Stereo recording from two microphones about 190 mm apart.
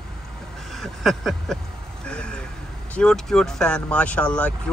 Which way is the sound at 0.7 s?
Centre (ahead or behind).